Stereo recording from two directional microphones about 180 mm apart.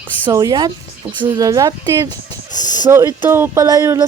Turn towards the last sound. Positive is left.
turn(degrees=-20)  # may be behind; listen again after turning